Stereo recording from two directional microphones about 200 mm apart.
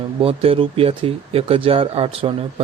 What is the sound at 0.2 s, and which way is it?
Speech, 30° right (ahead or behind).